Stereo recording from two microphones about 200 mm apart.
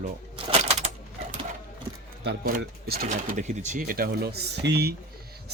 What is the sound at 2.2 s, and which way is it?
Speech, 50° right (ahead or behind).